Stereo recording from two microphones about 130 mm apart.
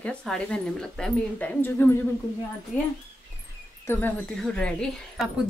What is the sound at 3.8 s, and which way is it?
A woman's voice, 15° left (ahead or behind).